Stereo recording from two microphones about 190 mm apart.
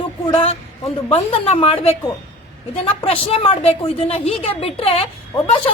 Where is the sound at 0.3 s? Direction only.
35° left (ahead or behind).